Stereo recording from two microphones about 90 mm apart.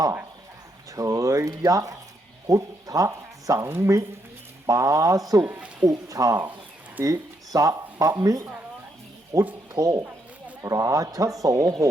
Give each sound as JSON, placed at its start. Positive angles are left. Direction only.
{"t": 0.9, "sound": "speech", "side_deg": -40}
{"t": 9.3, "sound": "speech", "side_deg": -35}